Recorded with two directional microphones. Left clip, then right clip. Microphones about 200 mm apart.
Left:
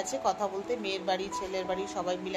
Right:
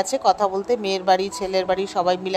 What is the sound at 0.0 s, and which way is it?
Speech, 45° right (ahead or behind).